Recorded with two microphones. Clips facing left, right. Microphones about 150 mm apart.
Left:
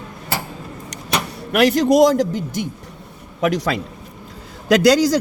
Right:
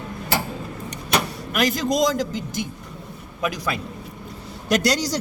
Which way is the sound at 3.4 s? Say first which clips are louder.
Left 7 dB; 80° left.